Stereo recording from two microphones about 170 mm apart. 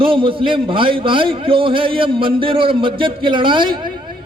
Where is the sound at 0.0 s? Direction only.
30° right (ahead or behind).